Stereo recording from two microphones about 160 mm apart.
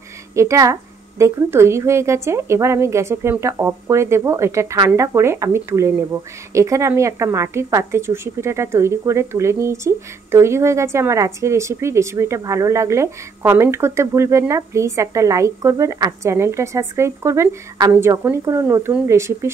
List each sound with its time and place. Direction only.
0.4 s speech: 20° right (ahead or behind)